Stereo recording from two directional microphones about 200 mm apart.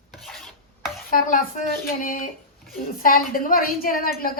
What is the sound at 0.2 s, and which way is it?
Filing, centre (ahead or behind).